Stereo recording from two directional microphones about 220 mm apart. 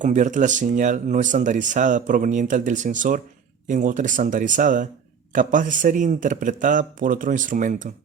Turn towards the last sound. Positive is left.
turn(degrees=-35)  # may be behind; listen again after turning